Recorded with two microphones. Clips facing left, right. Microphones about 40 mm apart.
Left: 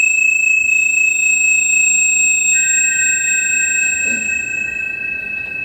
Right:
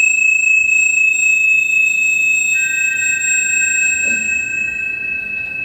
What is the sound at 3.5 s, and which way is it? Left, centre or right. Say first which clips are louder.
Chime: right 1 dB; centre.